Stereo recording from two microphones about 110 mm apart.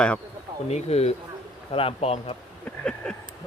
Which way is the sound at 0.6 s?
75° left (ahead or behind).